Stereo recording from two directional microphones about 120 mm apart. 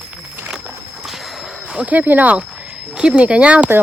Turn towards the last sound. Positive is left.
turn(degrees=-10)  # may be behind; listen again after turning